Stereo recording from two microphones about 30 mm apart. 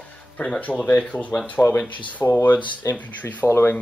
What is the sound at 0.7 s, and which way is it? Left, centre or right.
Speech, left.